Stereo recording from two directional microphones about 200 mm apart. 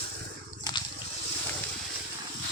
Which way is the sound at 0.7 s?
20° left (ahead or behind).